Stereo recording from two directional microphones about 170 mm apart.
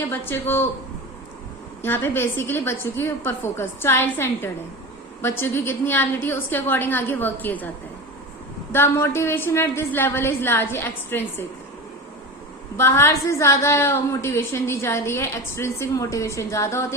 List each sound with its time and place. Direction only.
0.1 s a woman's voice: 10° left (ahead or behind)
1.8 s a woman's voice: 15° left (ahead or behind)
8.7 s a woman's voice: 15° left (ahead or behind)
12.7 s a woman's voice: 15° left (ahead or behind)